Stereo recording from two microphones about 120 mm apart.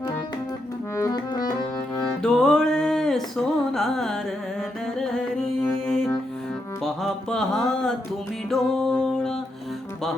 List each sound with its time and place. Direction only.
0.9 s music: 30° left (ahead or behind)
2.2 s music: 5° left (ahead or behind)
4.9 s carnatic music: 5° left (ahead or behind)
5.6 s music: 5° left (ahead or behind)
6.8 s mantra: 5° left (ahead or behind)
8.4 s music: 5° left (ahead or behind)